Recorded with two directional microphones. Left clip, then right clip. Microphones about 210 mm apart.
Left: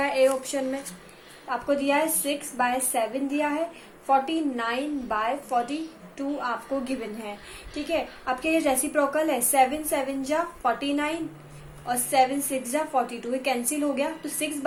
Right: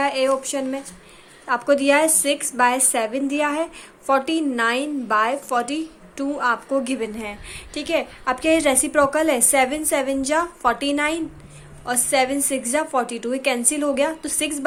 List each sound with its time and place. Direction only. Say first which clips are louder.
0.0 s speech: right 2 dB; 25° right (ahead or behind)
1.5 s a woman's voice: right 7 dB; 40° right (ahead or behind)